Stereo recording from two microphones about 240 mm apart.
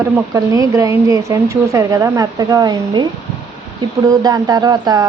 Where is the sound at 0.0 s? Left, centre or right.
Centre.